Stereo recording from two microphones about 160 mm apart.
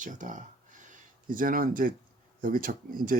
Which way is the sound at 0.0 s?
50° right (ahead or behind).